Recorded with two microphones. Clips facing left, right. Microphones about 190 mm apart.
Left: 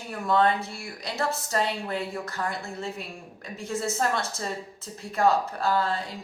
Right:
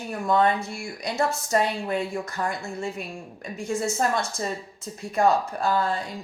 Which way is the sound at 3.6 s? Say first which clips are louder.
Right 4 dB; 15° right (ahead or behind).